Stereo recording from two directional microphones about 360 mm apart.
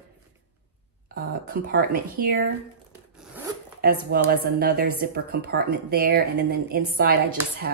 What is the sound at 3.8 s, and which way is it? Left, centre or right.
A woman's voice, right.